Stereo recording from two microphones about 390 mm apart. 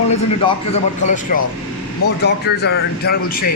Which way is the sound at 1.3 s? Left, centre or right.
Left.